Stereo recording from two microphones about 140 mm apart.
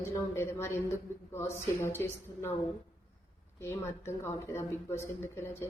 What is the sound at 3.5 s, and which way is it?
A woman's voice, 20° left (ahead or behind).